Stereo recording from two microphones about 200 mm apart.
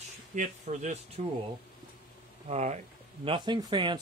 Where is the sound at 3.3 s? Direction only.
25° right (ahead or behind).